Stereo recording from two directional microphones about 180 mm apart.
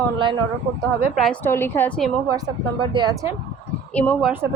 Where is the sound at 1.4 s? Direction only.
15° left (ahead or behind).